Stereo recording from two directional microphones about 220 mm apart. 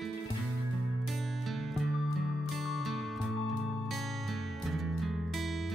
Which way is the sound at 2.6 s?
Centre (ahead or behind).